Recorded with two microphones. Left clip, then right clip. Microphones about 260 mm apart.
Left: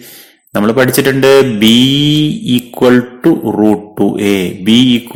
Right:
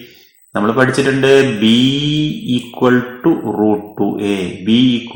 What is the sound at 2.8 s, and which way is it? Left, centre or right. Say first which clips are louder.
Speech: left 4 dB; left.